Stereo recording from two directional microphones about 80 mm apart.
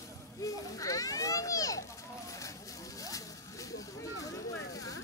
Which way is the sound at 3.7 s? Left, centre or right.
Left.